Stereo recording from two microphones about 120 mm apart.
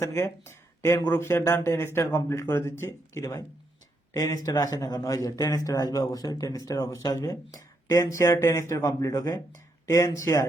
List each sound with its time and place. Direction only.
0.0 s speech: 20° left (ahead or behind)